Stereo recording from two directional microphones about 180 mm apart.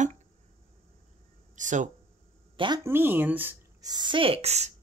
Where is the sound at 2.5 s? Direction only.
25° right (ahead or behind).